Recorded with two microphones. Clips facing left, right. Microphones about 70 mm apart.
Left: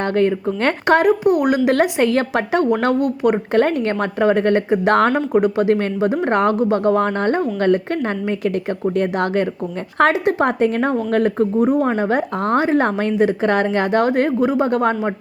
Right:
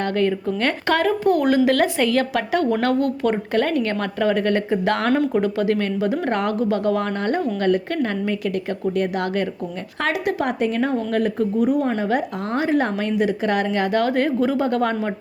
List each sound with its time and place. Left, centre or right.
0.0 s speech: left
3.0 s speech: centre
3.5 s speech: left